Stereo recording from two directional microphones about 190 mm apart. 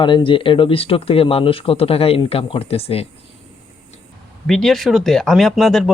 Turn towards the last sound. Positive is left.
turn(degrees=0)  # may be behind; listen again after turning